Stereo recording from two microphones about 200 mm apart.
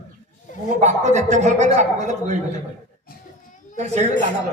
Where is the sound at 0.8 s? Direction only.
35° right (ahead or behind).